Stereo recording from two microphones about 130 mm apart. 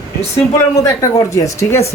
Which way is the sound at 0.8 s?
25° left (ahead or behind).